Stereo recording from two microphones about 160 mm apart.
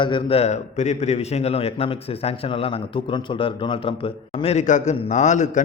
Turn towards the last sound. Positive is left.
turn(degrees=50)  # may be behind; listen again after turning